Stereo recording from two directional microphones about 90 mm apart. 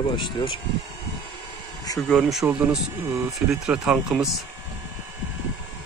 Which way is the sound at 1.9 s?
45° left (ahead or behind).